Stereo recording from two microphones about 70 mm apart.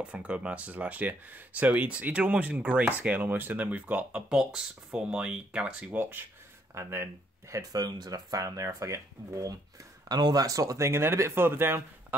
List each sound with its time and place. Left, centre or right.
0.0 s speech: centre
5.9 s speech: right
7.5 s speech: right
10.0 s speech: right
10.4 s speech: right
10.9 s speech: right